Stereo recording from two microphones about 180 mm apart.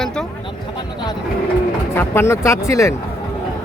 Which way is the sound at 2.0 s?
15° left (ahead or behind).